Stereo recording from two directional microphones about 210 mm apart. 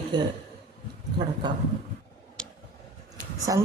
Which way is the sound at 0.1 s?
20° right (ahead or behind).